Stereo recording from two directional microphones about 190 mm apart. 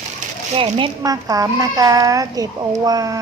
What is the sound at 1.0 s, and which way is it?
A child's voice, 15° right (ahead or behind).